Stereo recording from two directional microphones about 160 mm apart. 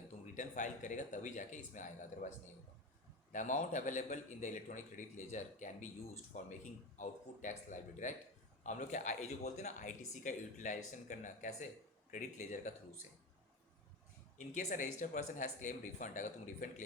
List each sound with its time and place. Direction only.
0.3 s speech: 50° left (ahead or behind)
3.3 s speech: 50° left (ahead or behind)
14.3 s speech: 50° left (ahead or behind)